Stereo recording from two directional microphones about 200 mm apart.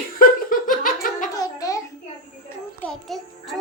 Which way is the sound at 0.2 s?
45° left (ahead or behind).